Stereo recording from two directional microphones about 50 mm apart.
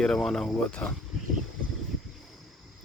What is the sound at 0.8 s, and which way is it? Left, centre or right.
Speech, left.